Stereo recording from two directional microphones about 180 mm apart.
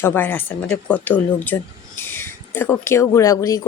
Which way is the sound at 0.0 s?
10° left (ahead or behind).